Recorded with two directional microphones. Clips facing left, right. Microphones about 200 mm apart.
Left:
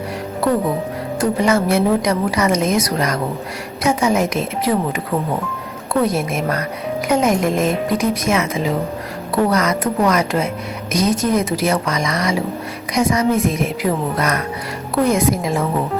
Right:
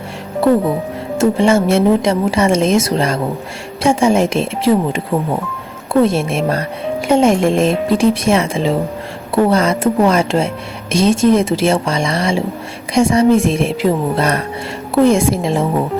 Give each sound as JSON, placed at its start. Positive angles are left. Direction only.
{"t": 1.2, "sound": "a woman's voice", "side_deg": -25}